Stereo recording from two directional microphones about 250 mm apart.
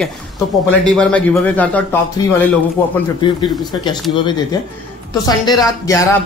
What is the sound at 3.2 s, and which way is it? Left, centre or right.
Speech, centre.